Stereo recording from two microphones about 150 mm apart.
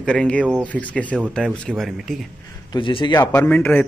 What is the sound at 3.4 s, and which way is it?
Speech, 10° left (ahead or behind).